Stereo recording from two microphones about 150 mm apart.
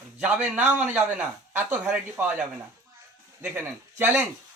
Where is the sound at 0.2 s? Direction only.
10° right (ahead or behind).